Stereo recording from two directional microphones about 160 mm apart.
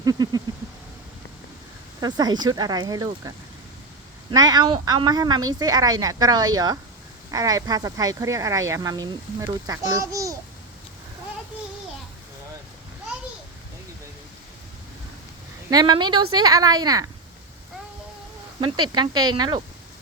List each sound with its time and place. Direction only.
0.0 s a sound: 25° right (ahead or behind)
2.0 s speech: 25° right (ahead or behind)
15.7 s speech: 25° right (ahead or behind)
18.6 s speech: 25° right (ahead or behind)